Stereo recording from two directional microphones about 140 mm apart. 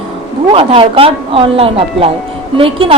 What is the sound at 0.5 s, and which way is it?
A woman's voice, 40° right (ahead or behind).